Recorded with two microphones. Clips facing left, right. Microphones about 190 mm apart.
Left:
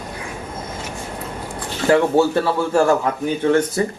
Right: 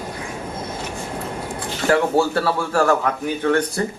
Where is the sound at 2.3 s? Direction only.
20° left (ahead or behind).